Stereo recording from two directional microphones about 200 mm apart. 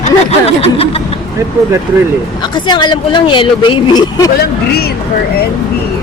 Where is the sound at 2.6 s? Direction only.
20° left (ahead or behind).